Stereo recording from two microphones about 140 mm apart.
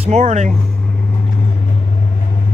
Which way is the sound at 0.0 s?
55° right (ahead or behind).